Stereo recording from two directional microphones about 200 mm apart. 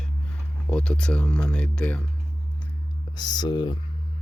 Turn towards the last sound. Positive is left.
turn(degrees=20)  # may be behind; listen again after turning